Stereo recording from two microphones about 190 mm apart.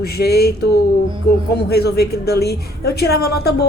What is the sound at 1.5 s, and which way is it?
A woman's voice, 60° left (ahead or behind).